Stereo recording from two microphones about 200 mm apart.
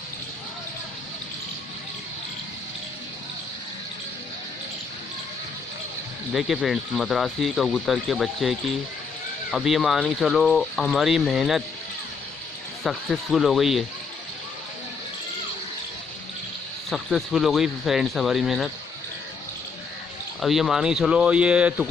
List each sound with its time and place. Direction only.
6.3 s speech: centre (ahead or behind)
12.8 s speech: centre (ahead or behind)
16.9 s speech: centre (ahead or behind)
20.3 s speech: centre (ahead or behind)